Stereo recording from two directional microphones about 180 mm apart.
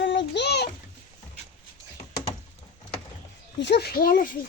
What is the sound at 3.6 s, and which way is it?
Speech, 70° left (ahead or behind).